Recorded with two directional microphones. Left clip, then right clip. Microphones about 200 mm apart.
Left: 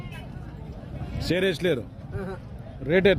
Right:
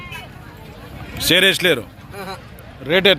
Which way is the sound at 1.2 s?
5° right (ahead or behind).